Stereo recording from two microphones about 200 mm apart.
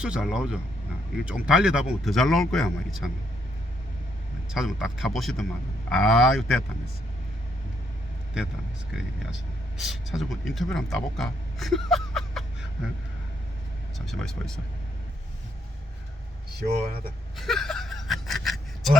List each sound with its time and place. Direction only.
0.0 s speech: 5° right (ahead or behind)
4.4 s speech: centre (ahead or behind)
9.7 s speech: centre (ahead or behind)
14.0 s speech: centre (ahead or behind)
16.6 s speech: 55° right (ahead or behind)
17.3 s speech: centre (ahead or behind)